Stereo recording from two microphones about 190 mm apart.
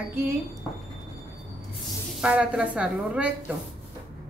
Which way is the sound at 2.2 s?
5° right (ahead or behind).